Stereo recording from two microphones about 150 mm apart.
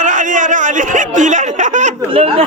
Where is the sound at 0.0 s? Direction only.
60° right (ahead or behind).